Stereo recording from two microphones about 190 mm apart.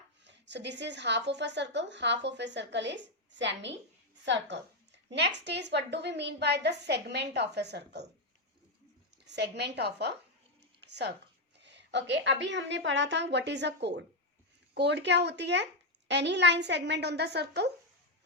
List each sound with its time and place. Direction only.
0.3 s a woman's voice: 65° right (ahead or behind)
9.2 s a woman's voice: 60° right (ahead or behind)